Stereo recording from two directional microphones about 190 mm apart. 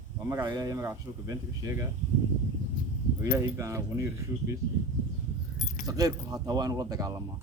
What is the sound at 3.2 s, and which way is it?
Speech, 15° right (ahead or behind).